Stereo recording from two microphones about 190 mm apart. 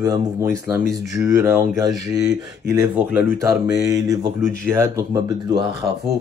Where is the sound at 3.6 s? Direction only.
15° right (ahead or behind).